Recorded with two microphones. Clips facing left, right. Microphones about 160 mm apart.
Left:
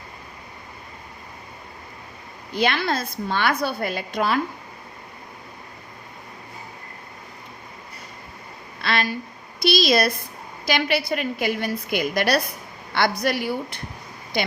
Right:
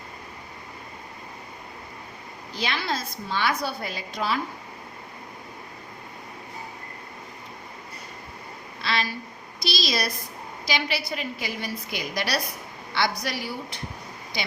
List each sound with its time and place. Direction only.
2.6 s a woman's voice: 55° left (ahead or behind)
8.8 s a sound: 55° left (ahead or behind)
9.6 s a woman's voice: 55° left (ahead or behind)